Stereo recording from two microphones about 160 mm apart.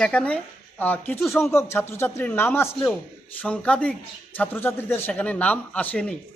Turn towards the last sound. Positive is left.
turn(degrees=10)  # may be behind; listen again after turning